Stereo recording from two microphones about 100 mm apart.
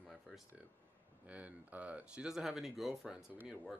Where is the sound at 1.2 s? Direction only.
15° right (ahead or behind).